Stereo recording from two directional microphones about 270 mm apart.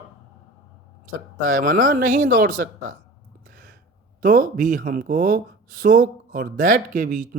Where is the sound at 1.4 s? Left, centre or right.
Right.